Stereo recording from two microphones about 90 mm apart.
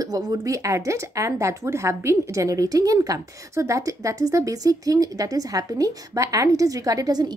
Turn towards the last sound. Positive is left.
turn(degrees=-45)  # may be behind; listen again after turning